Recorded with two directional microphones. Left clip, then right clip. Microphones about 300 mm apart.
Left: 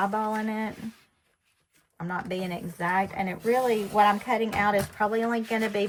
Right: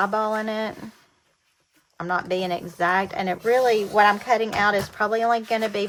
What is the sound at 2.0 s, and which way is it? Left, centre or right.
Speech, centre.